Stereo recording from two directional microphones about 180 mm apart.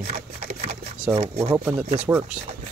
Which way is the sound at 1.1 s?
35° right (ahead or behind).